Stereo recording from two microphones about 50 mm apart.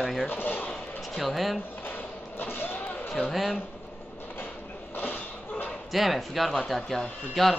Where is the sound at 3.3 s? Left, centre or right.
Centre.